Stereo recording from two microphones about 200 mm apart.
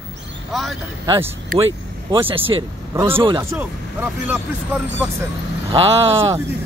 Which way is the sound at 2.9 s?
10° right (ahead or behind).